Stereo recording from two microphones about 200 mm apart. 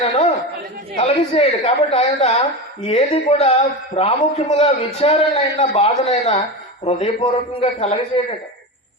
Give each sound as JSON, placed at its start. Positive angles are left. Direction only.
{"t": 0.9, "sound": "a woman's voice", "side_deg": 30}